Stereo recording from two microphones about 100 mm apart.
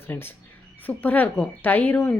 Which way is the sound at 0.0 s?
20° left (ahead or behind).